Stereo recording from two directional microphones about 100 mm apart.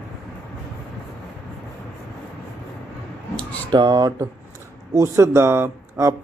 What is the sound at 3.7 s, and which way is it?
Speech, 45° right (ahead or behind).